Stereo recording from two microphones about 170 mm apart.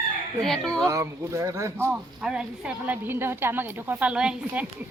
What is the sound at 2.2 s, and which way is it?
A woman's voice, 5° right (ahead or behind).